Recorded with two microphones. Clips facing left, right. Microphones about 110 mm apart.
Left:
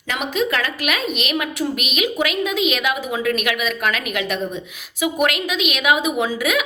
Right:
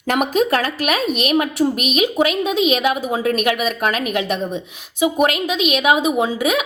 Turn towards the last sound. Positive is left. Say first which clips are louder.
# right 2 dB
turn(degrees=-30)  # may be behind; listen again after turning